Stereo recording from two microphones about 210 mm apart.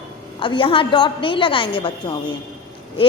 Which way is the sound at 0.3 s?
25° left (ahead or behind).